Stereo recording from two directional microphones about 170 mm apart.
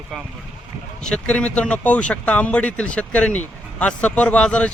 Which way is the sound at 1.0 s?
5° left (ahead or behind).